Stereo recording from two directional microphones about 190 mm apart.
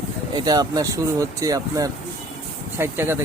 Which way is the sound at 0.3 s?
20° right (ahead or behind).